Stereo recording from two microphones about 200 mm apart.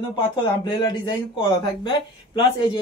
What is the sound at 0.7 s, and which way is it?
Speech, 20° left (ahead or behind).